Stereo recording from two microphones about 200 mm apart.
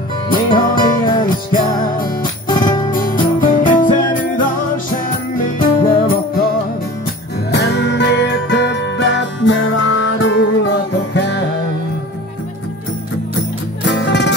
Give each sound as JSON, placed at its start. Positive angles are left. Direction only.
{"t": 0.6, "sound": "music", "side_deg": 45}
{"t": 7.5, "sound": "music", "side_deg": 55}
{"t": 13.8, "sound": "music", "side_deg": 65}